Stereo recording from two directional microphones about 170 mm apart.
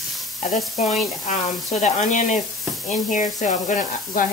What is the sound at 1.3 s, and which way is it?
Speech, 45° left (ahead or behind).